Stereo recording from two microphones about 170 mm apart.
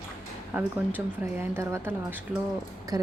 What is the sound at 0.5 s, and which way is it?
A woman's voice, 10° right (ahead or behind).